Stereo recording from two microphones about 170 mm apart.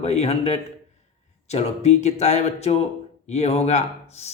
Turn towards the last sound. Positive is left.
turn(degrees=40)  # may be behind; listen again after turning